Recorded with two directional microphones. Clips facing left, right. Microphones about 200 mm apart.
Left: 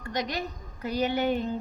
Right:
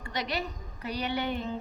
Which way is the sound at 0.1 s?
45° left (ahead or behind).